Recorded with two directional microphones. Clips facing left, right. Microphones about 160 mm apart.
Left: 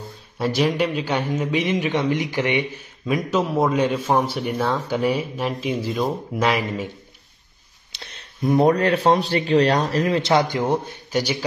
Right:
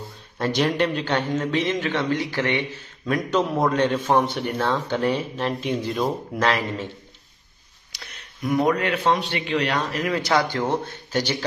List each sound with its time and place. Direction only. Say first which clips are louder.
0.4 s a man's voice: left 1 dB; 5° left (ahead or behind)
7.9 s speech: left 2 dB; 30° left (ahead or behind); by 11.3 s 10° left (ahead or behind)